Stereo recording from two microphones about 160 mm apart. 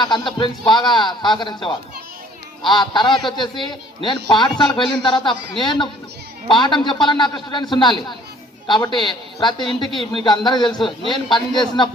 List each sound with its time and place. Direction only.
0.0 s a man's voice: 30° left (ahead or behind)